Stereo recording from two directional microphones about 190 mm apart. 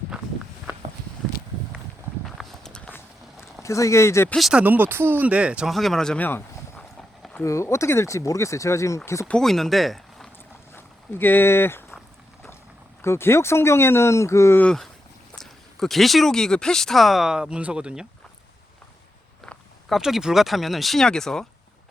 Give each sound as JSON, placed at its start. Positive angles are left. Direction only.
{"t": 2.2, "sound": "walk", "side_deg": 0}
{"t": 3.6, "sound": "speech", "side_deg": 15}
{"t": 4.4, "sound": "speech", "side_deg": -5}
{"t": 10.8, "sound": "a sound", "side_deg": 10}
{"t": 13.0, "sound": "speech", "side_deg": 15}
{"t": 19.5, "sound": "speech", "side_deg": 0}